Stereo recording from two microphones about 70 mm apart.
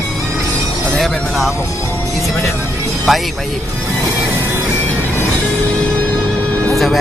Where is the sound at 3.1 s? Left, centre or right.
Centre.